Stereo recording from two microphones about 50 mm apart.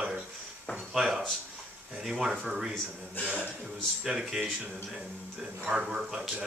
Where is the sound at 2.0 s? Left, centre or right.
Centre.